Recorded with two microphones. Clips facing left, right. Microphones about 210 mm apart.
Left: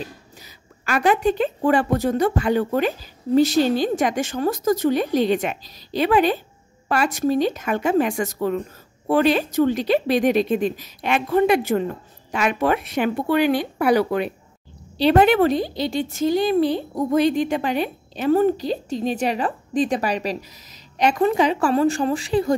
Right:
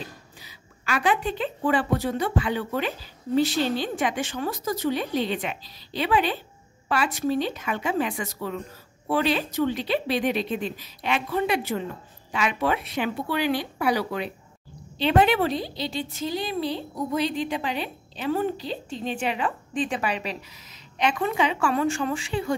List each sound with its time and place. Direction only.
0.4 s a woman's voice: 45° left (ahead or behind)